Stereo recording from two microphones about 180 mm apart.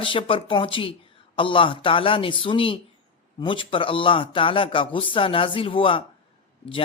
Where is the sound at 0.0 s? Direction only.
30° left (ahead or behind).